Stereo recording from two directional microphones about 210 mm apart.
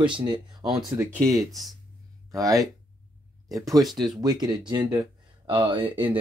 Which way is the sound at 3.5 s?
15° right (ahead or behind).